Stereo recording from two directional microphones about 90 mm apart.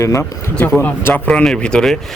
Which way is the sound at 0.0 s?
35° left (ahead or behind).